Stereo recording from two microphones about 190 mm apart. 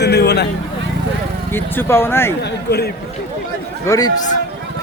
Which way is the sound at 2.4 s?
60° left (ahead or behind).